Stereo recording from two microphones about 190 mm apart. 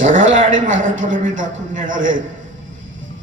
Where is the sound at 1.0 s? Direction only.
45° right (ahead or behind).